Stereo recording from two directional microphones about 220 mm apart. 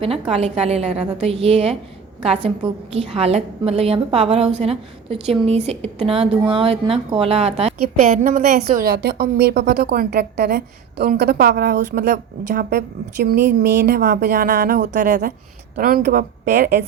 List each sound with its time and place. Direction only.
0.3 s a woman's voice: 30° right (ahead or behind)
2.9 s a woman's voice: 30° right (ahead or behind)
8.7 s a woman's voice: 45° right (ahead or behind)